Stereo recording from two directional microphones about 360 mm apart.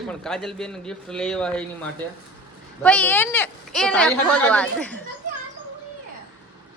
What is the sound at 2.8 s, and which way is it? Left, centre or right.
A woman's voice, centre.